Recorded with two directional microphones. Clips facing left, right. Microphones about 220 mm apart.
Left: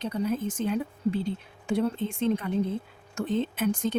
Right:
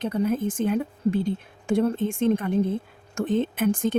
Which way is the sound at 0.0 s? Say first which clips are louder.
Right 4 dB; 50° right (ahead or behind).